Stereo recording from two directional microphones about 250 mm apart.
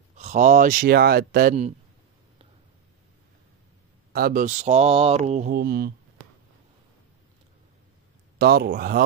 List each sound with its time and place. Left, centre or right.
0.2 s speech: right
4.1 s mantra: right
8.4 s speech: right